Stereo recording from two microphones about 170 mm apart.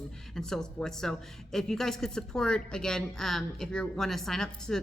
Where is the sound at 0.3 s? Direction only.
5° left (ahead or behind).